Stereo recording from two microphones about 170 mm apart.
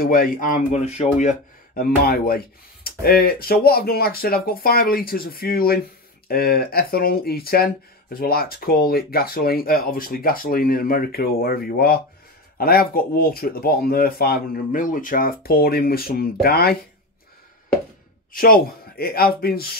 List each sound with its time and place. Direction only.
0.0 s speech: 60° left (ahead or behind); by 1.3 s 40° left (ahead or behind)
2.0 s speech: 60° left (ahead or behind)
18.3 s speech: 60° left (ahead or behind)